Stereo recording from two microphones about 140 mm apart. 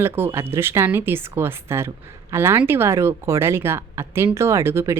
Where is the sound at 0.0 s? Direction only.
15° right (ahead or behind).